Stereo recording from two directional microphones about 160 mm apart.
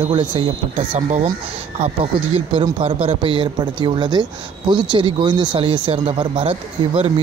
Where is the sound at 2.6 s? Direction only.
35° right (ahead or behind).